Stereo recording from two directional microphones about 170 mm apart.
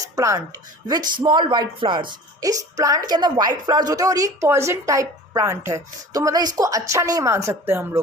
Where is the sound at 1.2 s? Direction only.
25° right (ahead or behind).